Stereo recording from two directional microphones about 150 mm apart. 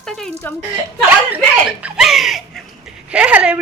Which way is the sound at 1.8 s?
5° right (ahead or behind).